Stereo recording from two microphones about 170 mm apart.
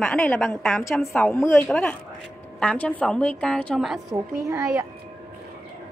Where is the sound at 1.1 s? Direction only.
10° left (ahead or behind).